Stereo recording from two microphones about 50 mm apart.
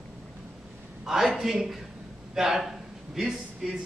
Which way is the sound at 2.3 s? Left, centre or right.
Centre.